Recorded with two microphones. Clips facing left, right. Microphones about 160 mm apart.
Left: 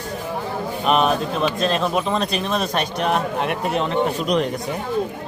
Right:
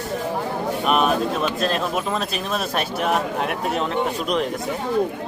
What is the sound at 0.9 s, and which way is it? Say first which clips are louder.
Speech: left 2 dB; 5° right (ahead or behind).